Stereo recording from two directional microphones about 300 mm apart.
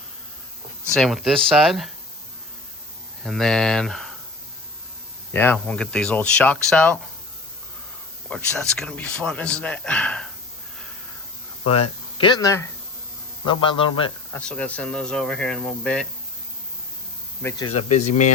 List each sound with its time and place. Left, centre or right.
0.9 s speech: centre
3.2 s speech: centre
5.3 s speech: centre
8.3 s speech: centre
11.6 s a man's voice: centre
14.3 s speech: centre
17.4 s a man's voice: centre